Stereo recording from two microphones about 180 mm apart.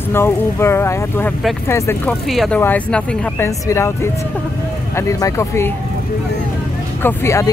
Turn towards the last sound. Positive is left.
turn(degrees=15)  # may be behind; listen again after turning